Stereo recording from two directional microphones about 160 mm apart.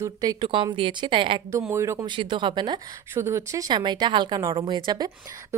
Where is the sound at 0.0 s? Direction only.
20° right (ahead or behind).